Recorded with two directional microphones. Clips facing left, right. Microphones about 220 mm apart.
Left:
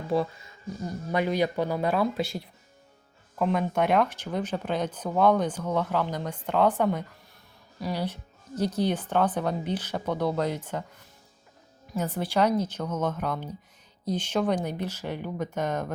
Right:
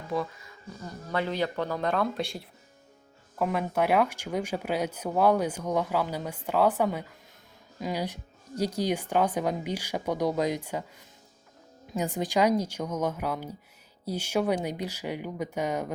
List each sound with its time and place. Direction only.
0.1 s speech: 30° left (ahead or behind)
1.1 s speech: 15° left (ahead or behind); by 10.8 s 10° right (ahead or behind)
11.9 s speech: 15° right (ahead or behind)